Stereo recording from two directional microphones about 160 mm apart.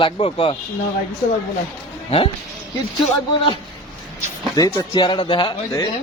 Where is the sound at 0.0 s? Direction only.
40° left (ahead or behind).